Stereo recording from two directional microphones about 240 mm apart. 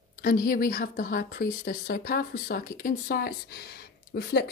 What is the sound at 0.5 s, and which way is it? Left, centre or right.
A woman's voice, left.